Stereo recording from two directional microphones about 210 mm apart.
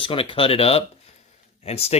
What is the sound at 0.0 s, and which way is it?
Speech, 25° left (ahead or behind).